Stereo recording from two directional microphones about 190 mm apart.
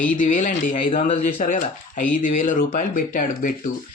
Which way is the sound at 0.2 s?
40° left (ahead or behind).